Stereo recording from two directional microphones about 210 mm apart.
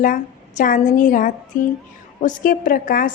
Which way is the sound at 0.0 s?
40° left (ahead or behind).